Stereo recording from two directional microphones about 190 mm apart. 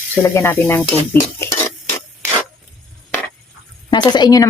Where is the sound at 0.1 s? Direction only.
10° left (ahead or behind).